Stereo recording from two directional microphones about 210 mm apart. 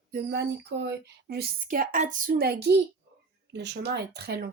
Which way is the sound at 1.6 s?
40° right (ahead or behind).